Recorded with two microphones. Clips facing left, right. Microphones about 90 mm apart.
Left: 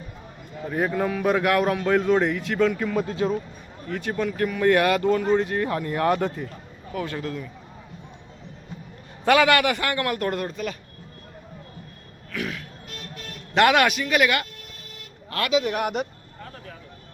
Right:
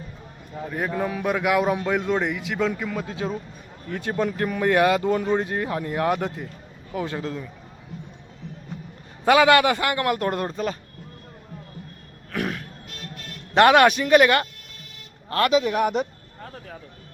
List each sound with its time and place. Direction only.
0.7 s a man's voice: 5° left (ahead or behind)
0.9 s a man's voice: 5° right (ahead or behind)
2.9 s speech: 5° left (ahead or behind)
3.9 s a man's voice: 20° right (ahead or behind)
6.9 s a man's voice: 20° right (ahead or behind)
9.2 s a man's voice: 20° right (ahead or behind)
12.3 s a sound: 45° right (ahead or behind)
13.5 s speech: 30° right (ahead or behind)